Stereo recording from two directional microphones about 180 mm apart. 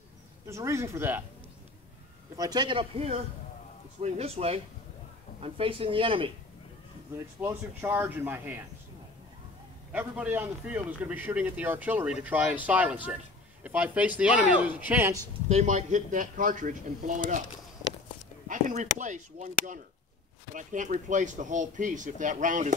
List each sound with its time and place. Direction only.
0.5 s a man's voice: 15° right (ahead or behind)
2.3 s speech: 20° right (ahead or behind)
7.3 s a man's voice: 10° right (ahead or behind)
9.9 s a man's voice: 10° right (ahead or behind)
15.4 s speech: 40° right (ahead or behind)
18.5 s speech: 40° right (ahead or behind)